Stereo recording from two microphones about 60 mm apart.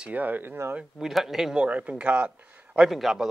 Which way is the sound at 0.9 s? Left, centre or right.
Centre.